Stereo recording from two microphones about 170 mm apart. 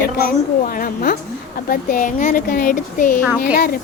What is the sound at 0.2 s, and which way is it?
A woman's voice, 55° left (ahead or behind).